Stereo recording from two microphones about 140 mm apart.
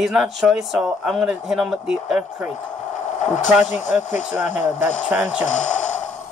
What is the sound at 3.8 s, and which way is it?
Speech, 60° left (ahead or behind).